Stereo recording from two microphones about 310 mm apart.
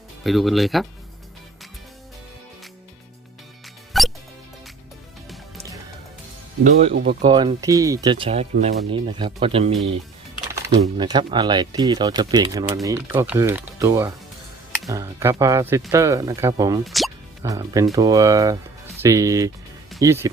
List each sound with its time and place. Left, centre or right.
0.3 s speech: centre
3.9 s music: centre
6.7 s speech: right
7.3 s speech: centre
10.8 s speech: centre
16.8 s speech: centre
17.4 s speech: centre